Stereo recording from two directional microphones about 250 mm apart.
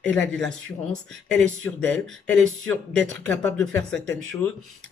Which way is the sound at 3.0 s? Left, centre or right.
Right.